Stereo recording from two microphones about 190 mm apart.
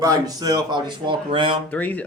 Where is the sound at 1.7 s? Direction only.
10° left (ahead or behind).